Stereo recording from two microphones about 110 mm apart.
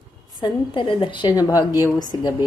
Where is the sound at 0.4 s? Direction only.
50° left (ahead or behind).